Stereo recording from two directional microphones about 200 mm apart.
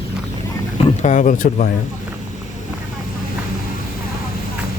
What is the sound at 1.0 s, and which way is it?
Speech, 40° left (ahead or behind).